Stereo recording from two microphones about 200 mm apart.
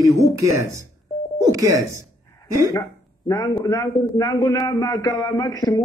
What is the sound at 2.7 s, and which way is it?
A man's voice, 20° left (ahead or behind).